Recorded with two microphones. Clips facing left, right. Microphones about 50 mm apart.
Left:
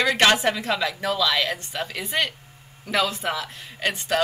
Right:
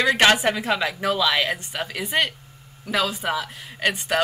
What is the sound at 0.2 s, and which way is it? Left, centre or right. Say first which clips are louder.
A woman's voice: right 1 dB; centre.